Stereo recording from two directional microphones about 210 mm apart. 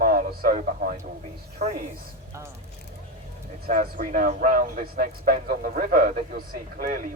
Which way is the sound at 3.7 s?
40° right (ahead or behind).